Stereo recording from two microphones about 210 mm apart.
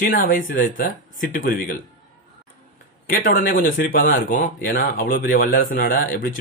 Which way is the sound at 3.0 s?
40° left (ahead or behind).